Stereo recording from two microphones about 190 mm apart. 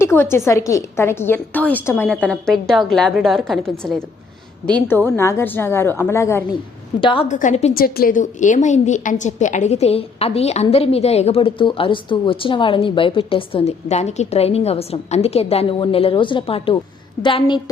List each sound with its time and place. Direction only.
0.0 s a woman's voice: 15° left (ahead or behind)
7.0 s a woman's voice: 25° left (ahead or behind)
7.3 s a woman's voice: 40° left (ahead or behind)
7.8 s a woman's voice: 50° left (ahead or behind); by 17.6 s 25° left (ahead or behind)